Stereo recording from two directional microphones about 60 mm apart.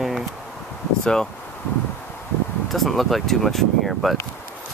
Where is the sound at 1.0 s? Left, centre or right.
Centre.